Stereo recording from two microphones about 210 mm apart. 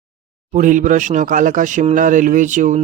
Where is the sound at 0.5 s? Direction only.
35° right (ahead or behind).